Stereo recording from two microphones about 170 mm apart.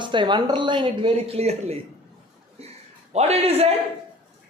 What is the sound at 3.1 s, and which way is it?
Speech, 40° right (ahead or behind).